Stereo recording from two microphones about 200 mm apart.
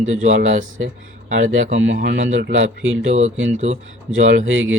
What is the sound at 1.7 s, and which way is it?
Speech, 65° right (ahead or behind).